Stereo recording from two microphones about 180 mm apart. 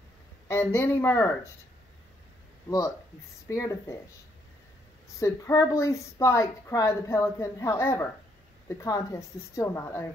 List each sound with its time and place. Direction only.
0.5 s a woman's voice: 15° left (ahead or behind)
3.4 s a woman's voice: 15° left (ahead or behind)
5.2 s a woman's voice: 15° left (ahead or behind)